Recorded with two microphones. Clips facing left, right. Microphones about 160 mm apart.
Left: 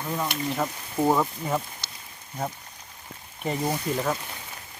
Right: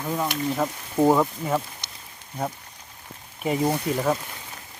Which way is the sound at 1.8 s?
20° right (ahead or behind).